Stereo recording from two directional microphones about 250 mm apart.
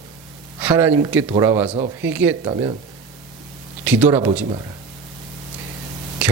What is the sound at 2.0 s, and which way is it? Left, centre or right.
Speech, centre.